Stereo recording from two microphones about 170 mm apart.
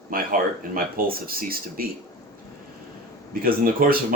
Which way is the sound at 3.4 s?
60° right (ahead or behind).